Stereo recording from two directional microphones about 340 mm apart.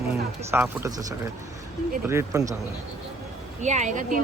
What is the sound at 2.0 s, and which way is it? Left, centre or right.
Speech, centre.